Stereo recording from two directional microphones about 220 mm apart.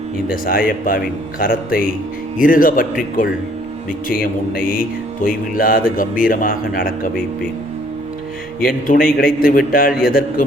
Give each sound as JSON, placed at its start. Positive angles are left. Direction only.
{"t": 0.4, "sound": "speech", "side_deg": 40}
{"t": 4.6, "sound": "speech", "side_deg": 40}
{"t": 8.6, "sound": "speech", "side_deg": 40}